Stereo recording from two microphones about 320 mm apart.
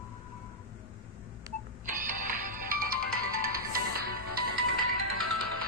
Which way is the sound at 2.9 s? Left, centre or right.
Right.